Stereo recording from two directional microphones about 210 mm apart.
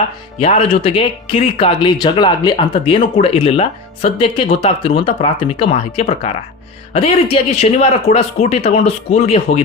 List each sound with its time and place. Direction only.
0.3 s speech: 30° left (ahead or behind)
7.5 s speech: 30° left (ahead or behind)